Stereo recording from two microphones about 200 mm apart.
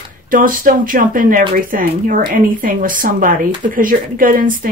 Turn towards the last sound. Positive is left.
turn(degrees=-45)  # may be behind; listen again after turning